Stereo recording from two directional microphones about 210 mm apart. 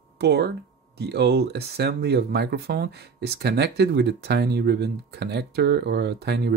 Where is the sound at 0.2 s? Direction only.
50° right (ahead or behind).